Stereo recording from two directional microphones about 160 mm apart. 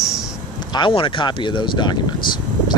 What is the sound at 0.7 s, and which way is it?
Speech, 30° left (ahead or behind).